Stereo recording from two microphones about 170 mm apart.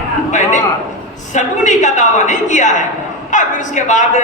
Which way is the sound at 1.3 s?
45° left (ahead or behind).